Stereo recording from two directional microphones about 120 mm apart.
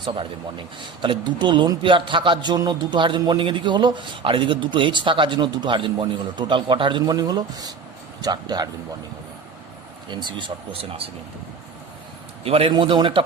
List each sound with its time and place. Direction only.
0.0 s speech: 45° right (ahead or behind)
10.1 s speech: 40° right (ahead or behind)
12.5 s speech: 55° right (ahead or behind)
12.7 s speech: 40° right (ahead or behind)